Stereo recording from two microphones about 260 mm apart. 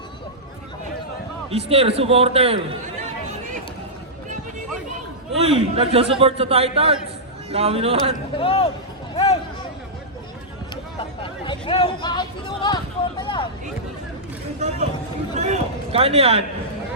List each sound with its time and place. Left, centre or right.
1.5 s a man's voice: right
5.4 s a man's voice: right
8.4 s speech: left
9.1 s a sound: left
11.2 s speech: centre
15.4 s speech: right